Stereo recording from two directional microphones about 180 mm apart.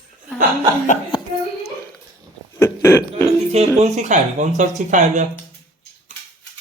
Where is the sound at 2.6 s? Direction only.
15° left (ahead or behind).